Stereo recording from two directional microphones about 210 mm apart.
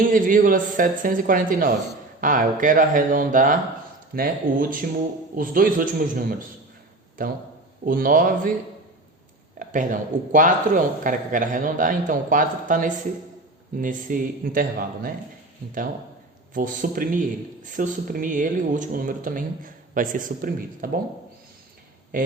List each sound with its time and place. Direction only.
0.0 s a man's voice: 40° right (ahead or behind)
9.6 s a man's voice: 40° right (ahead or behind)
16.6 s a man's voice: 40° right (ahead or behind)